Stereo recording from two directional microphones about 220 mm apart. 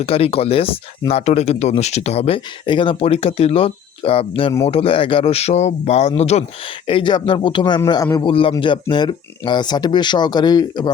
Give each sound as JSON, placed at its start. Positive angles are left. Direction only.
{"t": 0.0, "sound": "speech", "side_deg": 25}